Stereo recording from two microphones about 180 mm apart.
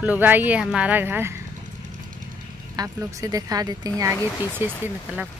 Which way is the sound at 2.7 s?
20° right (ahead or behind).